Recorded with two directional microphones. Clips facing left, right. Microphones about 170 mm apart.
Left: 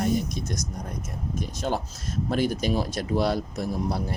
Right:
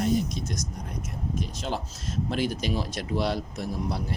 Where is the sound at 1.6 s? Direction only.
50° left (ahead or behind).